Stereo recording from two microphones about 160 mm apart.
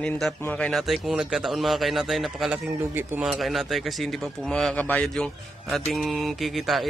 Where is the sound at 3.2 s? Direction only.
Centre (ahead or behind).